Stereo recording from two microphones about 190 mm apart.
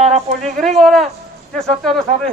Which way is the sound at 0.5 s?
Centre (ahead or behind).